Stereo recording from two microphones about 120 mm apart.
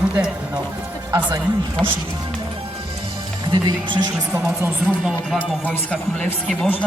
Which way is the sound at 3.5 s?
35° right (ahead or behind).